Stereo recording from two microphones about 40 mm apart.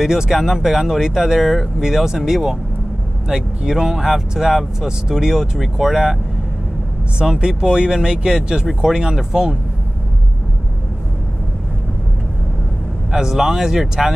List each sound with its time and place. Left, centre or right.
0.0 s speech: centre
7.2 s speech: right
13.1 s speech: centre